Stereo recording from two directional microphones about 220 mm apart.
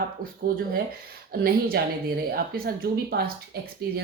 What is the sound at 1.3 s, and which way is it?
Speech, 45° right (ahead or behind).